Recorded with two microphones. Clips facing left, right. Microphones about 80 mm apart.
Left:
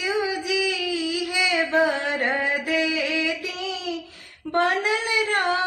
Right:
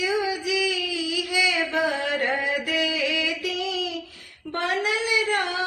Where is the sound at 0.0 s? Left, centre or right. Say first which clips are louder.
Even; left.